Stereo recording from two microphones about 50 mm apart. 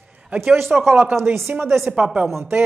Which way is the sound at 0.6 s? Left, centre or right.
Centre.